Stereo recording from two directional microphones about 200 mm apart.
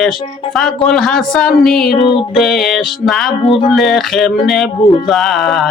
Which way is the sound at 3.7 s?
Centre (ahead or behind).